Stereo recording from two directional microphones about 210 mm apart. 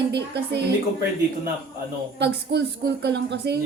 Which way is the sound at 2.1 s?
55° right (ahead or behind).